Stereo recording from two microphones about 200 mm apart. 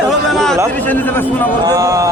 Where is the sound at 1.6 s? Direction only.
15° right (ahead or behind).